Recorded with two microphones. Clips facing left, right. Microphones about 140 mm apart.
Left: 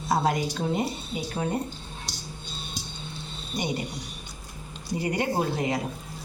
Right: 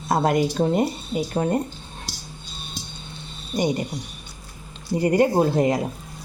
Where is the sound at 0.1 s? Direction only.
55° right (ahead or behind).